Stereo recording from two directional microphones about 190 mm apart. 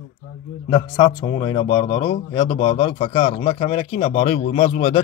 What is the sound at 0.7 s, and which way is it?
Speech, 25° left (ahead or behind).